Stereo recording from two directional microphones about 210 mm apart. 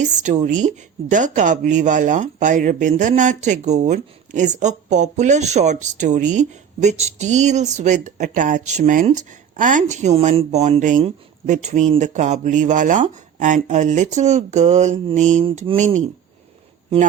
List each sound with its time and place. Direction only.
0.0 s speech: 35° right (ahead or behind)